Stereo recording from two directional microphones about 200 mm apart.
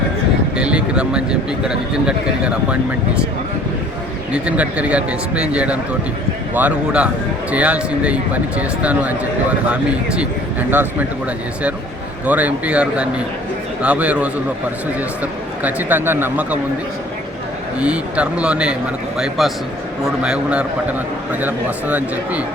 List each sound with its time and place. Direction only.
0.5 s a man's voice: 5° right (ahead or behind)
4.3 s a man's voice: 5° right (ahead or behind)
12.2 s a man's voice: 10° right (ahead or behind)
17.7 s a man's voice: 5° right (ahead or behind)